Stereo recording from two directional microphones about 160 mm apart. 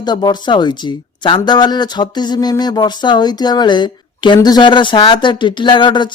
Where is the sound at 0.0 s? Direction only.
25° left (ahead or behind).